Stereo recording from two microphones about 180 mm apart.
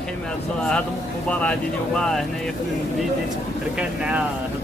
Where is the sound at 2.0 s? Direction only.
5° left (ahead or behind).